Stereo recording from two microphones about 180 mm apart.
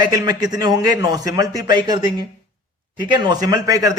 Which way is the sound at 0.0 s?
20° right (ahead or behind).